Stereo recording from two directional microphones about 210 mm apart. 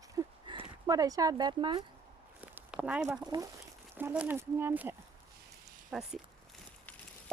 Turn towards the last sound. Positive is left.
turn(degrees=0)  # may be behind; listen again after turning